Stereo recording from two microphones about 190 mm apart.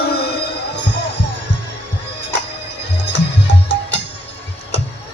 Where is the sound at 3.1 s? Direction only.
65° left (ahead or behind).